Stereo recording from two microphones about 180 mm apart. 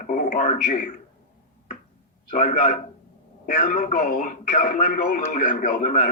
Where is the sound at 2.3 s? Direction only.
45° left (ahead or behind).